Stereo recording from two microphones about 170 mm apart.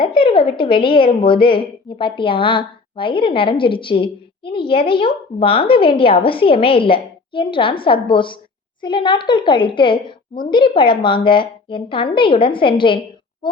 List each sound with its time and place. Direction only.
0.0 s a woman's voice: 30° left (ahead or behind)